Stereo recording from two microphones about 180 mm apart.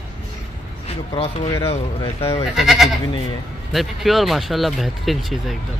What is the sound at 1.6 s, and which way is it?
Speech, 15° left (ahead or behind).